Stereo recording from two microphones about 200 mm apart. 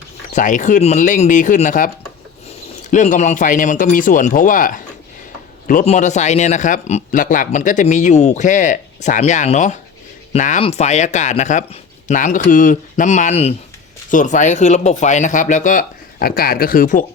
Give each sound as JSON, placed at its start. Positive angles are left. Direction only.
{"t": 0.3, "sound": "a man's voice", "side_deg": 40}